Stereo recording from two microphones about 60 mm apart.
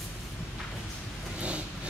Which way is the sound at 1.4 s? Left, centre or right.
Centre.